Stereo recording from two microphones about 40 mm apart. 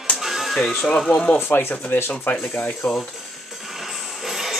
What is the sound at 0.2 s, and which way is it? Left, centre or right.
Music, centre.